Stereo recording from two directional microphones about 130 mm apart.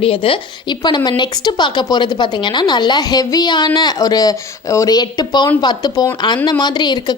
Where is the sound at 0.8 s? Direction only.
35° left (ahead or behind).